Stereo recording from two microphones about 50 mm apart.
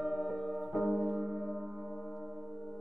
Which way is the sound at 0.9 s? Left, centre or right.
Centre.